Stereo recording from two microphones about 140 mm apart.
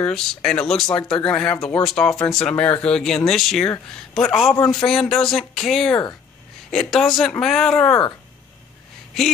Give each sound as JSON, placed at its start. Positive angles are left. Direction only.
{"t": 0.0, "sound": "speech", "side_deg": 5}
{"t": 2.1, "sound": "speech", "side_deg": 20}
{"t": 2.4, "sound": "speech", "side_deg": 10}